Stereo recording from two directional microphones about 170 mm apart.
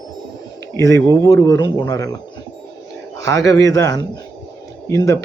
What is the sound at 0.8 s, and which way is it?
Speech, 20° left (ahead or behind).